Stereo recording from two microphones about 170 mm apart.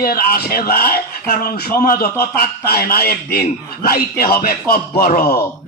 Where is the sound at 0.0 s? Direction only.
65° left (ahead or behind).